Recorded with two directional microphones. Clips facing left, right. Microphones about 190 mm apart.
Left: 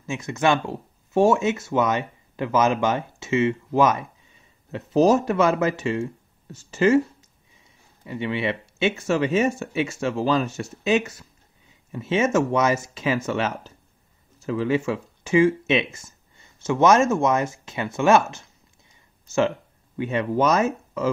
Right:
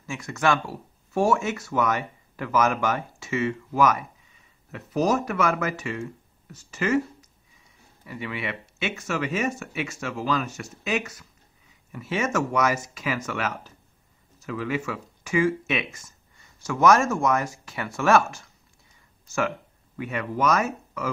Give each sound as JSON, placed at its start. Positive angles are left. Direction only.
{"t": 0.0, "sound": "speech", "side_deg": 20}
{"t": 20.0, "sound": "speech", "side_deg": 25}